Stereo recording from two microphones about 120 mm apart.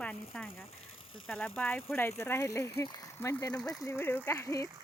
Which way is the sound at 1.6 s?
15° left (ahead or behind).